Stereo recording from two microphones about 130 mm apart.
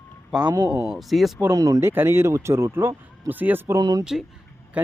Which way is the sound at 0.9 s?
Centre (ahead or behind).